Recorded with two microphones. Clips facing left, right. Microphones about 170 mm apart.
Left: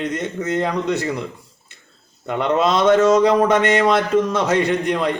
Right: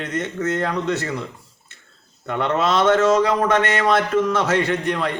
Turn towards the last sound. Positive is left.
turn(degrees=15)  # may be behind; listen again after turning